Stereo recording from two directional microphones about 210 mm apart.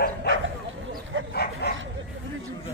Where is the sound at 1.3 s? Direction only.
50° left (ahead or behind).